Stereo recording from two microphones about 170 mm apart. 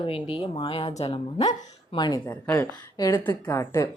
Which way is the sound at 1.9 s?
25° left (ahead or behind).